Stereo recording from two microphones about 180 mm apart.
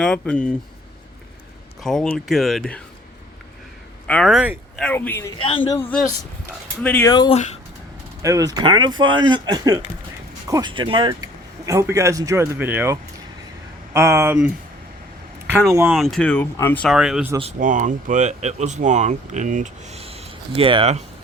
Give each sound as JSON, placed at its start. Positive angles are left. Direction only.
{"t": 0.0, "sound": "speech", "side_deg": 5}
{"t": 1.8, "sound": "speech", "side_deg": 5}
{"t": 4.0, "sound": "speech", "side_deg": 5}
{"t": 4.9, "sound": "speech", "side_deg": 10}
{"t": 5.4, "sound": "speech", "side_deg": 30}
{"t": 5.7, "sound": "speech", "side_deg": 10}
{"t": 7.1, "sound": "speech", "side_deg": 25}
{"t": 7.3, "sound": "speech", "side_deg": 40}
{"t": 8.2, "sound": "speech", "side_deg": -20}
{"t": 15.7, "sound": "speech", "side_deg": -15}
{"t": 16.0, "sound": "speech", "side_deg": 0}
{"t": 16.9, "sound": "speech", "side_deg": -5}
{"t": 17.6, "sound": "speech", "side_deg": -45}